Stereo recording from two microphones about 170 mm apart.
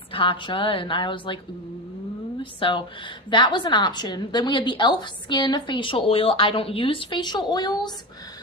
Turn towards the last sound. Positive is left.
turn(degrees=25)  # may be behind; listen again after turning